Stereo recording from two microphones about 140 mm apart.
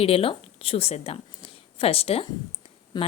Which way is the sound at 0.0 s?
45° left (ahead or behind).